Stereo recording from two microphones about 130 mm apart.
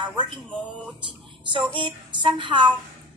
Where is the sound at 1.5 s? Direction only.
40° right (ahead or behind).